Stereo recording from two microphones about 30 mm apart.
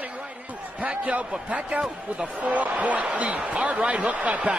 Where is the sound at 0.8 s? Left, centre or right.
Right.